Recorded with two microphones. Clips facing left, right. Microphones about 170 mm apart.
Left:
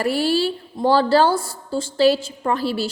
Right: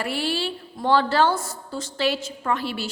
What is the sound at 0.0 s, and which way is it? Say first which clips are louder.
A woman's voice: left 7 dB; 40° left (ahead or behind).